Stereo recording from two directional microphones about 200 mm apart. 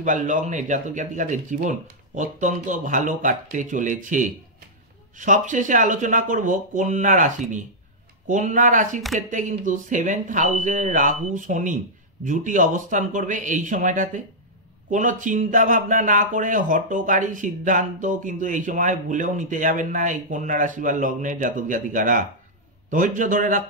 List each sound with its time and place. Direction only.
0.0 s a man's voice: 40° right (ahead or behind)